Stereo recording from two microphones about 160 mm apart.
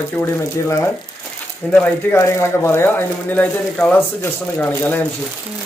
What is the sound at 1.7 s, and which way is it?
Speech, 15° left (ahead or behind).